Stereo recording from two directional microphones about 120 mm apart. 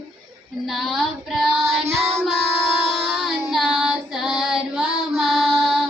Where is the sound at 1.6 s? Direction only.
20° right (ahead or behind).